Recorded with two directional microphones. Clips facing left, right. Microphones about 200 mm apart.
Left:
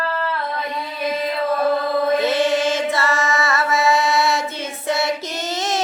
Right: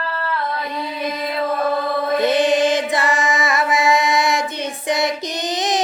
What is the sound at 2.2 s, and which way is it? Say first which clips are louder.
Music: right 2 dB; 15° right (ahead or behind).